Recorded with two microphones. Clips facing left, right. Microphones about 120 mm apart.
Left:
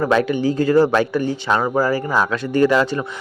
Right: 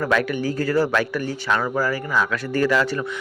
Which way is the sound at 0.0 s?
25° left (ahead or behind).